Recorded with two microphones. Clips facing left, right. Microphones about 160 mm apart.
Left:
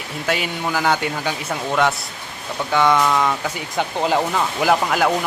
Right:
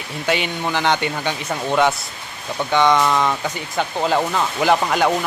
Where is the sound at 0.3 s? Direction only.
5° left (ahead or behind).